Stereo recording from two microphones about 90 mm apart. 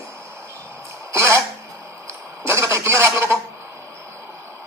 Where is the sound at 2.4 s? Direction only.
30° right (ahead or behind).